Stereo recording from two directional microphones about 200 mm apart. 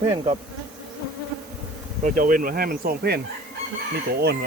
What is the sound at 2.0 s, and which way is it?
Speech, 45° right (ahead or behind).